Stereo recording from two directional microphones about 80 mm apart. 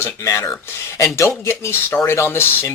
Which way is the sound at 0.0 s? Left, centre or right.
Left.